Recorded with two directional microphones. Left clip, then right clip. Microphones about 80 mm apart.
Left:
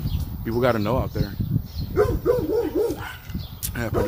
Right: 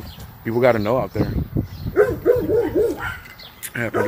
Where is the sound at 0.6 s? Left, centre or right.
Centre.